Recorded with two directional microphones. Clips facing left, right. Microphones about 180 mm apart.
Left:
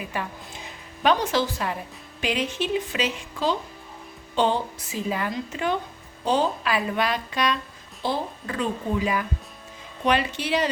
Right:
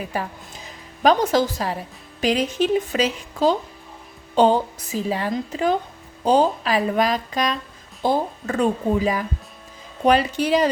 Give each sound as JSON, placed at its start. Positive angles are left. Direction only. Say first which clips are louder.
{"t": 0.1, "sound": "a woman's voice", "louder": "right 3 dB", "side_deg": -40}